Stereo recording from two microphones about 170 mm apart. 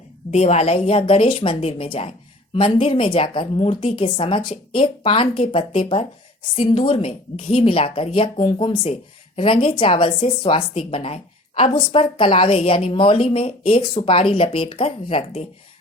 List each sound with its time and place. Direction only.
0.3 s a woman's voice: 40° left (ahead or behind)